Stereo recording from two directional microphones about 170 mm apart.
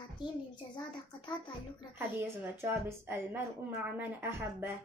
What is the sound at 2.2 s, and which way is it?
A woman's voice, 15° right (ahead or behind).